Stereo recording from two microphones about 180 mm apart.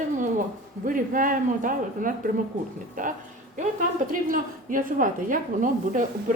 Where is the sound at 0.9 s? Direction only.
50° right (ahead or behind).